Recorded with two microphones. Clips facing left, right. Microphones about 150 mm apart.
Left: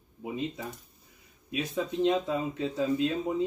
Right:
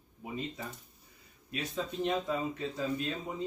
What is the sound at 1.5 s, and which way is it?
Speech, 15° left (ahead or behind).